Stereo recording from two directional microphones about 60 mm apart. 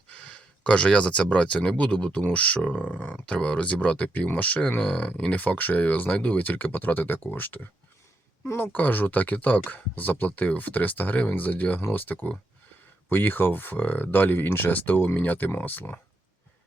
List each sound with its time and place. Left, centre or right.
0.1 s speech: left